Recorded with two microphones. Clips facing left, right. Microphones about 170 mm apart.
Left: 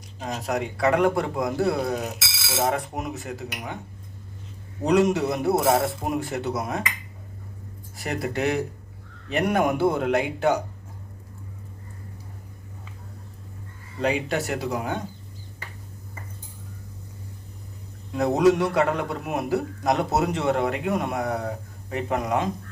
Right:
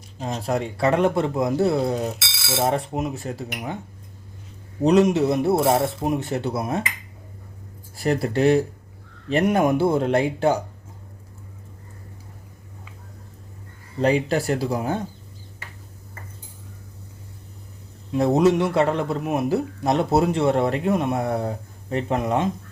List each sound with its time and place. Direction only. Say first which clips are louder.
0.2 s a man's voice: right 2 dB; 30° right (ahead or behind)
4.8 s a man's voice: right 3 dB; 25° right (ahead or behind)
7.9 s a man's voice: right 6 dB; 30° right (ahead or behind)
14.0 s speech: right 4 dB; 35° right (ahead or behind)
18.1 s a man's voice: right 2 dB; 25° right (ahead or behind)